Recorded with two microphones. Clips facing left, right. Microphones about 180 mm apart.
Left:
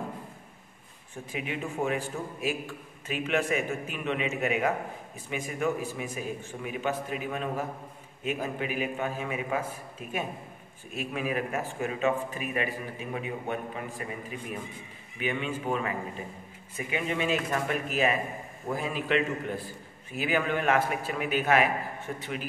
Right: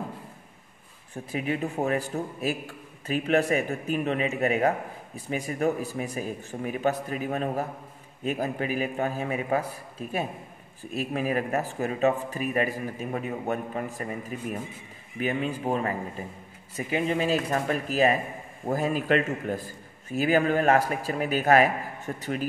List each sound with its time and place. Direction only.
1.3 s a man's voice: 40° right (ahead or behind)
15.1 s a man's voice: 40° right (ahead or behind)